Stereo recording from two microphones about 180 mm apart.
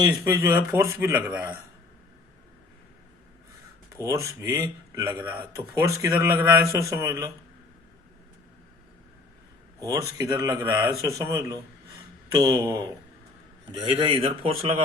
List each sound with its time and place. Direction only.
0.0 s speech: 20° right (ahead or behind)
3.9 s speech: 15° right (ahead or behind)
9.8 s speech: 20° right (ahead or behind)
13.7 s speech: 30° right (ahead or behind)